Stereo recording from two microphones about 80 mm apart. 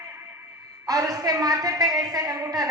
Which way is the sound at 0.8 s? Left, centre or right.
Right.